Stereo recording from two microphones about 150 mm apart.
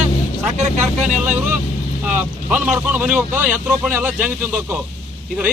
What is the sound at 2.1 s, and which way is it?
Speech, 10° right (ahead or behind).